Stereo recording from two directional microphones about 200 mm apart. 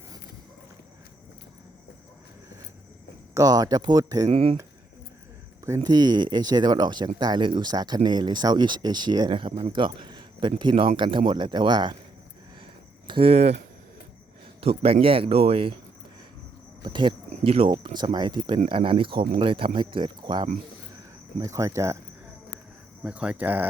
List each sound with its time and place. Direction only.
3.3 s speech: 20° right (ahead or behind)
4.3 s speech: 30° right (ahead or behind)
5.6 s speech: 15° right (ahead or behind)
13.1 s speech: 25° right (ahead or behind)
14.6 s speech: 30° right (ahead or behind)
16.8 s speech: 25° right (ahead or behind)
23.0 s speech: 5° right (ahead or behind)